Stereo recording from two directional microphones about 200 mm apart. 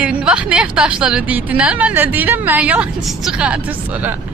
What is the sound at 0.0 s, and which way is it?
A woman's voice, 5° right (ahead or behind).